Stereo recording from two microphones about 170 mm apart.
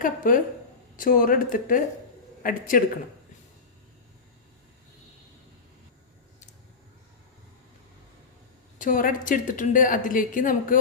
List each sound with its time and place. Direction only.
0.0 s a woman's voice: 55° left (ahead or behind)
8.8 s a woman's voice: 50° left (ahead or behind)